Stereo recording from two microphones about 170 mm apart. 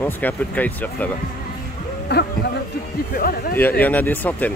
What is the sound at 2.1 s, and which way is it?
Speech, 75° left (ahead or behind).